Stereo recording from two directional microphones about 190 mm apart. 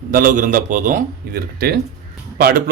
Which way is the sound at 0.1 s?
45° right (ahead or behind).